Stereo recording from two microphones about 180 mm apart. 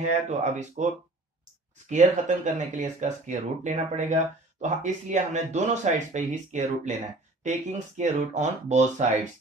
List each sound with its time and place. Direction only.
0.0 s speech: 40° right (ahead or behind)